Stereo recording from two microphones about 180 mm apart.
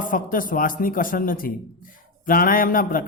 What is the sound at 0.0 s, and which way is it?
A man's voice, 50° left (ahead or behind).